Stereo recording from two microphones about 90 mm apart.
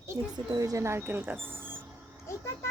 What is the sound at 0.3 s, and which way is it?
A child's voice, 45° right (ahead or behind).